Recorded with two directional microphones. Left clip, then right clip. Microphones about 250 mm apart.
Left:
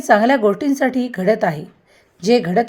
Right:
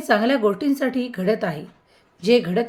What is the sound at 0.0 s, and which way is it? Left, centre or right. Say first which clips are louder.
A woman's voice: left 5 dB; centre.